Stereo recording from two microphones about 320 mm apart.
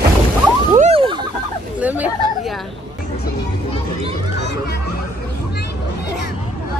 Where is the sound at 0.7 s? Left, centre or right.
Centre.